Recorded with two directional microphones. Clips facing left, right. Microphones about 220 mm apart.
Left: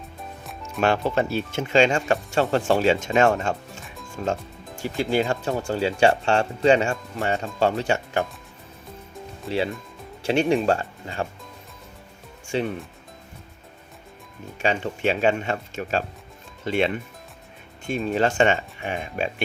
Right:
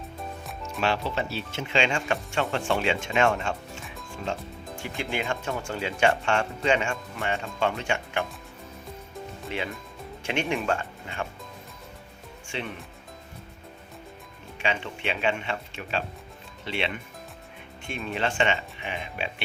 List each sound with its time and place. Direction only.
0.8 s speech: 50° left (ahead or behind)
10.2 s speech: 35° left (ahead or behind)
12.5 s speech: 40° left (ahead or behind)
14.6 s speech: 40° left (ahead or behind)